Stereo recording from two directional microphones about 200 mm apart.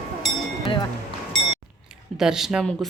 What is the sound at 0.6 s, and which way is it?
Music, 25° left (ahead or behind).